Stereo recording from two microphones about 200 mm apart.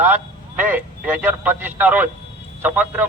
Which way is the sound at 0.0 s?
10° right (ahead or behind).